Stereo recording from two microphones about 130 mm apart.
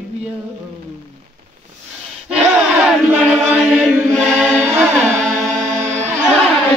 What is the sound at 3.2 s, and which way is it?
Chant, centre (ahead or behind).